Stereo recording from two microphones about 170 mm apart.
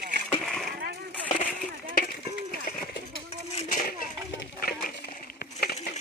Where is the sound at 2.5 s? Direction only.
60° left (ahead or behind).